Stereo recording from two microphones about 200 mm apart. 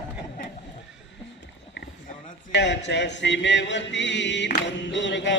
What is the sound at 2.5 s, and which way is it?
Speech, 60° left (ahead or behind).